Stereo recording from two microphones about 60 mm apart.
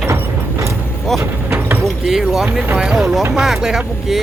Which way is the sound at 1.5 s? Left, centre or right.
Right.